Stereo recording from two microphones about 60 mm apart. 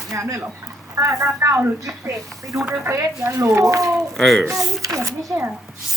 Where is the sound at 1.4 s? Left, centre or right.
Right.